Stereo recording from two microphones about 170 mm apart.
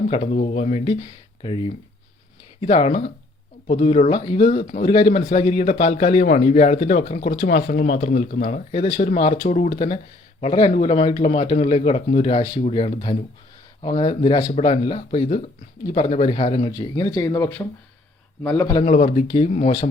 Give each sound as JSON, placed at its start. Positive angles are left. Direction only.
{"t": 0.4, "sound": "a man's voice", "side_deg": 40}
{"t": 18.9, "sound": "speech", "side_deg": 45}